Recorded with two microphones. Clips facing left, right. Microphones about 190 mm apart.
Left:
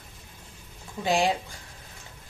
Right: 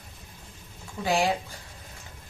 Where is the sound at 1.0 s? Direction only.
15° left (ahead or behind).